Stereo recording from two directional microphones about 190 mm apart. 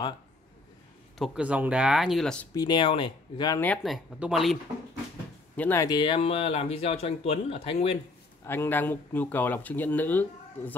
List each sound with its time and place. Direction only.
1.1 s speech: centre (ahead or behind)
2.5 s speech: 20° left (ahead or behind)
3.6 s speech: 5° left (ahead or behind)
5.6 s speech: 15° left (ahead or behind); by 8.0 s 30° left (ahead or behind)
8.5 s speech: 10° left (ahead or behind)